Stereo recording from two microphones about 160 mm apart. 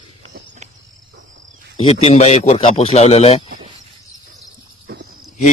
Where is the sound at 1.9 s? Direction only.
40° left (ahead or behind).